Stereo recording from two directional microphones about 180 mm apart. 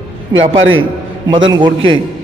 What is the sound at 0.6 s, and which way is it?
Speech, 90° right.